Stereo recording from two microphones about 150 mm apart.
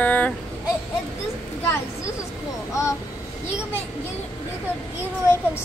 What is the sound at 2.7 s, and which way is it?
Speech, 20° left (ahead or behind).